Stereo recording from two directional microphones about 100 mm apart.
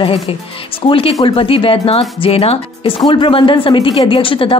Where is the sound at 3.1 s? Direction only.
55° left (ahead or behind).